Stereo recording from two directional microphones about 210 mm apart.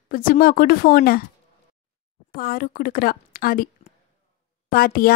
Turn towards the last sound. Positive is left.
turn(degrees=45)  # may be behind; listen again after turning